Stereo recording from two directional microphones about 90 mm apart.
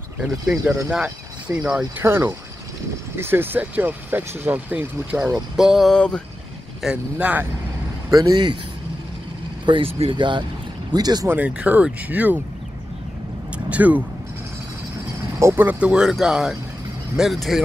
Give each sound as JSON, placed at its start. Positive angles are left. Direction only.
{"t": 0.2, "sound": "speech", "side_deg": -10}
{"t": 2.0, "sound": "speech", "side_deg": -25}
{"t": 5.6, "sound": "speech", "side_deg": -5}
{"t": 5.9, "sound": "speech", "side_deg": 10}
{"t": 6.8, "sound": "speech", "side_deg": -10}
{"t": 8.1, "sound": "speech", "side_deg": -45}
{"t": 9.7, "sound": "speech", "side_deg": -80}
{"t": 10.9, "sound": "speech", "side_deg": -50}
{"t": 11.2, "sound": "speech", "side_deg": -15}
{"t": 13.7, "sound": "speech", "side_deg": -15}
{"t": 15.3, "sound": "speech", "side_deg": -30}
{"t": 15.6, "sound": "speech", "side_deg": -15}